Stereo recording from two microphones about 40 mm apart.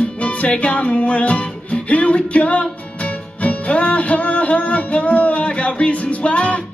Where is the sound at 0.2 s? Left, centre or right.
Left.